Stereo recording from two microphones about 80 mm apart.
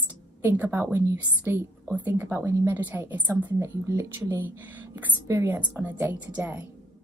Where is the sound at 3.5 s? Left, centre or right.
Right.